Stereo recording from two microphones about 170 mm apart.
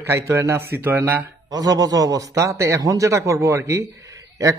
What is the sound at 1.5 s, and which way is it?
A man's voice, 20° right (ahead or behind).